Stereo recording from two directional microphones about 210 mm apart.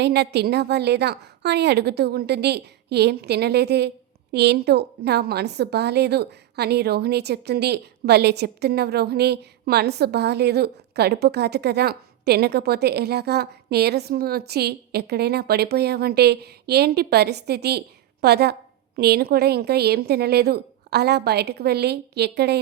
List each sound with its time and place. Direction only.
0.0 s a woman's voice: 55° right (ahead or behind)